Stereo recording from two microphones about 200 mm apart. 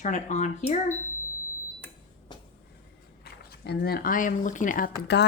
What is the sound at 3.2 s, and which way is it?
Speech, 55° left (ahead or behind).